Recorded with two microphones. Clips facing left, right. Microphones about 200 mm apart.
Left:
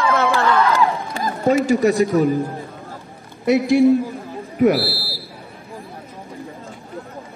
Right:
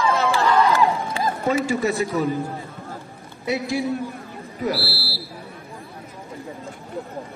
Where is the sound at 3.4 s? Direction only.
55° left (ahead or behind).